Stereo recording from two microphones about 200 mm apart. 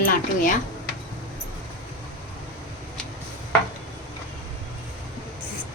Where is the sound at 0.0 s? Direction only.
45° left (ahead or behind).